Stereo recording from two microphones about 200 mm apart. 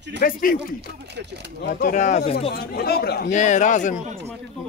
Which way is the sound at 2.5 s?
50° left (ahead or behind).